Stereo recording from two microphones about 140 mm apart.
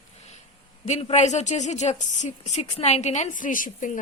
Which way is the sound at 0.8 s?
50° left (ahead or behind).